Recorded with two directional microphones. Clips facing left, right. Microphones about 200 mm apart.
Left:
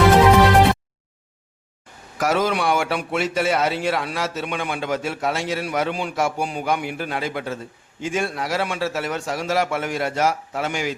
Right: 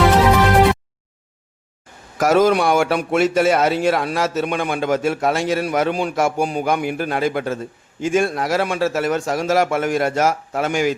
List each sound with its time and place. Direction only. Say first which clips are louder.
2.1 s a man's voice: right 6 dB; 45° right (ahead or behind)